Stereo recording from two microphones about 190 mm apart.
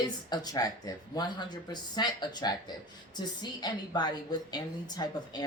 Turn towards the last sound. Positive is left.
turn(degrees=20)  # may be behind; listen again after turning